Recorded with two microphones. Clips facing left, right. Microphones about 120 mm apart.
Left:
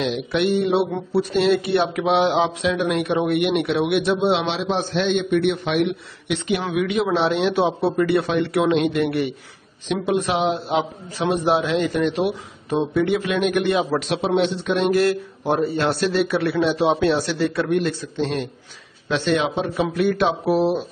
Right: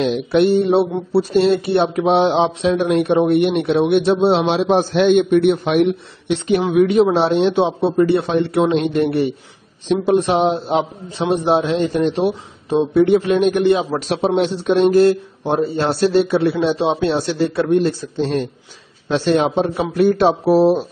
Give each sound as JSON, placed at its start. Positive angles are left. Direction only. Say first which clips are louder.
{"t": 0.0, "sound": "a man's voice", "louder": "right 6 dB", "side_deg": -40}